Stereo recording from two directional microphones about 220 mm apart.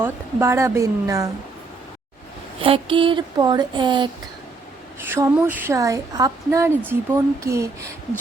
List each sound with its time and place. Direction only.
0.0 s speech: 10° right (ahead or behind)
2.6 s speech: 25° right (ahead or behind)
5.0 s speech: 10° right (ahead or behind)